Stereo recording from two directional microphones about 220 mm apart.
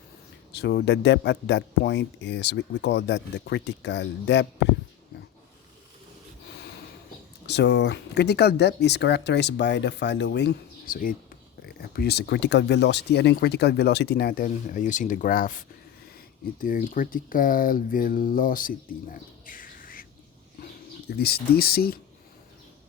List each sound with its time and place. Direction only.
0.5 s speech: 50° left (ahead or behind)
7.4 s speech: 50° left (ahead or behind)
21.1 s speech: 45° left (ahead or behind)